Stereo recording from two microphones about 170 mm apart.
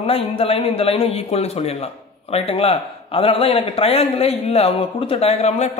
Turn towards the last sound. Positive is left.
turn(degrees=40)  # may be behind; listen again after turning